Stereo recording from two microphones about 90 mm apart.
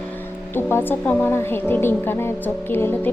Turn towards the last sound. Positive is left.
turn(degrees=25)  # may be behind; listen again after turning